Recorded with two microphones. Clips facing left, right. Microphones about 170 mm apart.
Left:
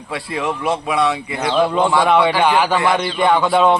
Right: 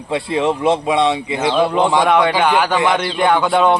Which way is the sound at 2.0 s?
5° left (ahead or behind).